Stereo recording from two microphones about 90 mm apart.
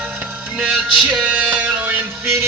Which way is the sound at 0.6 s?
10° right (ahead or behind).